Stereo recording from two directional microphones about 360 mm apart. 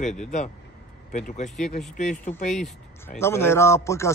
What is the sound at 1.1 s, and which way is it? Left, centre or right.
Speech, centre.